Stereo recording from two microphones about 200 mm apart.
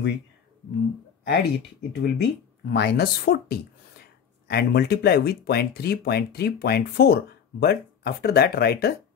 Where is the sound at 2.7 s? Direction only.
55° left (ahead or behind).